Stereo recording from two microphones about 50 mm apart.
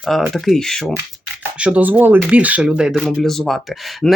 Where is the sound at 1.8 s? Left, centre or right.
Right.